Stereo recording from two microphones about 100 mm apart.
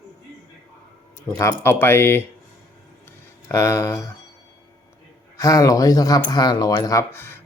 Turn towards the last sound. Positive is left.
turn(degrees=25)  # may be behind; listen again after turning